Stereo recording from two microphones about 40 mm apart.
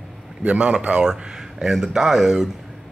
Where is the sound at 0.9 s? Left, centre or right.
Centre.